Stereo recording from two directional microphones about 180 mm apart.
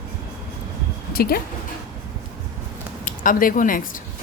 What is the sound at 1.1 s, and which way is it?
Speech, 55° left (ahead or behind).